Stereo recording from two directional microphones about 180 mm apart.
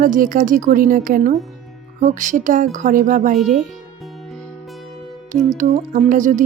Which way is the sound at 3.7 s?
Centre (ahead or behind).